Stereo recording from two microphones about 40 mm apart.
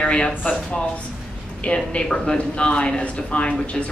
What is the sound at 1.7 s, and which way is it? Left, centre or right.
A woman's voice, left.